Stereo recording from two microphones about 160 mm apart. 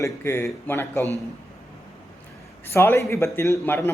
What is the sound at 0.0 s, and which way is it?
A man's voice, 15° left (ahead or behind).